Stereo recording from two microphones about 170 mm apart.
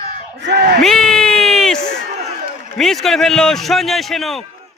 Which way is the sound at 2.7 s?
Centre (ahead or behind).